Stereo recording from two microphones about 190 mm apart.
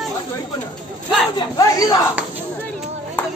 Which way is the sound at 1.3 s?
20° left (ahead or behind).